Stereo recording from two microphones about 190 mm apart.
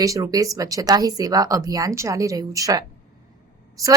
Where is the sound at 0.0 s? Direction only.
15° right (ahead or behind).